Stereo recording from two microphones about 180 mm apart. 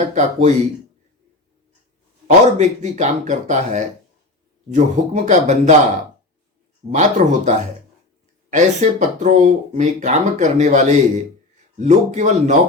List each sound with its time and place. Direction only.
0.0 s speech: 40° right (ahead or behind)
2.2 s speech: 40° right (ahead or behind)
6.8 s speech: 35° right (ahead or behind)